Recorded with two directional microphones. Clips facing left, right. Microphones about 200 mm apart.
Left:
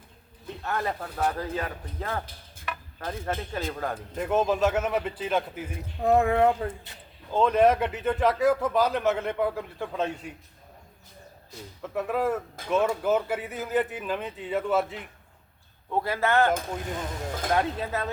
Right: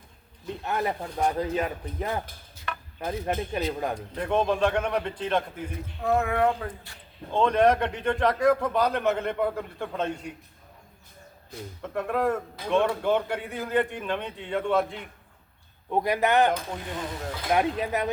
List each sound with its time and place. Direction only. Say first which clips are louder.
0.4 s speech: right 2 dB; 20° right (ahead or behind)
2.7 s a sound: even; 5° left (ahead or behind)
3.0 s speech: right 3 dB; 20° right (ahead or behind)
3.9 s a man's voice: left 4 dB; 5° left (ahead or behind)
6.0 s speech: left 3 dB; 30° left (ahead or behind)
7.3 s a man's voice: even; 5° left (ahead or behind)
11.8 s a man's voice: even; centre (ahead or behind)
15.9 s speech: right 2 dB; 15° right (ahead or behind)
17.5 s speech: right 3 dB; 15° right (ahead or behind)